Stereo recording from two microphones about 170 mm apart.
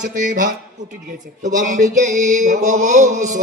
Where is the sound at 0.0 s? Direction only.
50° right (ahead or behind).